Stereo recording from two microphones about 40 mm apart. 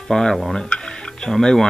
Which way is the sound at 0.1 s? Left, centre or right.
Centre.